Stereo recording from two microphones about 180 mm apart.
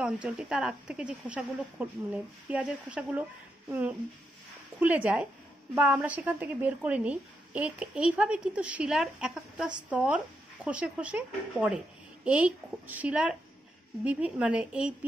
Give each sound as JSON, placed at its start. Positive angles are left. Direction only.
{"t": 0.0, "sound": "a woman's voice", "side_deg": -5}
{"t": 4.7, "sound": "a woman's voice", "side_deg": -10}